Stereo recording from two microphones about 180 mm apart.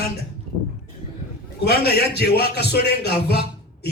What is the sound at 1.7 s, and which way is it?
A man's voice, 60° left (ahead or behind).